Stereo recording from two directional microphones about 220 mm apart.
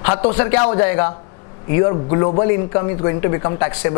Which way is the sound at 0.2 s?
30° left (ahead or behind).